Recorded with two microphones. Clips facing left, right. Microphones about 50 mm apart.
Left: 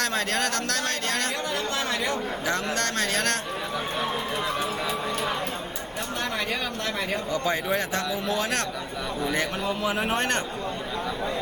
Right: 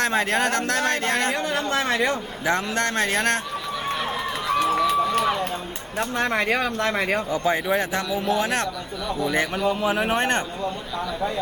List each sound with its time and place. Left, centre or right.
0.0 s a man's voice: centre; by 2.1 s right
2.4 s a man's voice: right
4.6 s run: right
6.1 s speech: right
7.3 s a man's voice: centre
10.2 s a man's voice: right